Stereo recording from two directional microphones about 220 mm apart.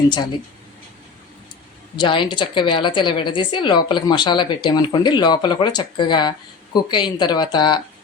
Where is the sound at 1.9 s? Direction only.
20° left (ahead or behind).